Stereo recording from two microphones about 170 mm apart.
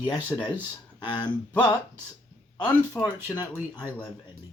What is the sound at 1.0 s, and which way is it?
Speech, 25° left (ahead or behind).